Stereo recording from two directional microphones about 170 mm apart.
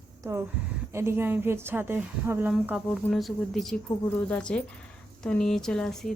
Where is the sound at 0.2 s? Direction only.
15° right (ahead or behind).